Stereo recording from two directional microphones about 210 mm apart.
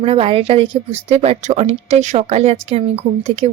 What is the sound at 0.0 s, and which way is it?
A woman's voice, 30° right (ahead or behind).